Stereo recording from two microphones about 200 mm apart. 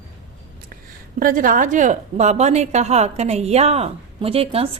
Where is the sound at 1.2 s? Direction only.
45° right (ahead or behind).